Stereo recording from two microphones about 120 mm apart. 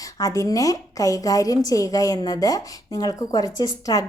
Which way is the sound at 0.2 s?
30° left (ahead or behind).